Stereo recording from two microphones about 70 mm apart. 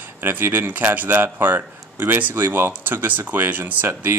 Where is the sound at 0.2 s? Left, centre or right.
Right.